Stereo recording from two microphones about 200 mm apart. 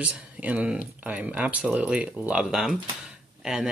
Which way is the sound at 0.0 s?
5° right (ahead or behind).